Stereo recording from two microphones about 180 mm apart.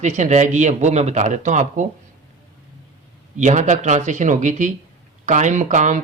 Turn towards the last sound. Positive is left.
turn(degrees=-45)  # may be behind; listen again after turning